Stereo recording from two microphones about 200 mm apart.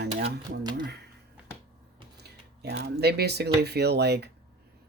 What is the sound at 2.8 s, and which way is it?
Speech, 55° right (ahead or behind).